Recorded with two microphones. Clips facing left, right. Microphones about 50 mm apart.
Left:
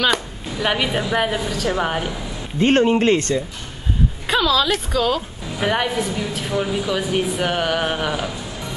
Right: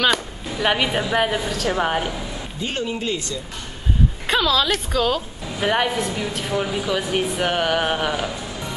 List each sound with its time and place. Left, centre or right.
0.0 s a woman's voice: centre
2.6 s speech: left
4.3 s a woman's voice: centre